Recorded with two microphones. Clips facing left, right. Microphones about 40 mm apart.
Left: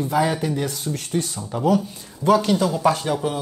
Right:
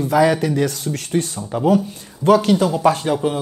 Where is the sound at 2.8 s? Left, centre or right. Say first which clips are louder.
Right 3 dB; right.